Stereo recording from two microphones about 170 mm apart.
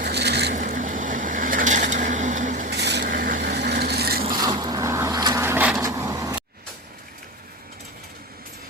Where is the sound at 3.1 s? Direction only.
60° right (ahead or behind).